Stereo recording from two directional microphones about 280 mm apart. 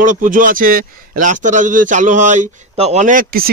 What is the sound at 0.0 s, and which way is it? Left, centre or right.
A man's voice, right.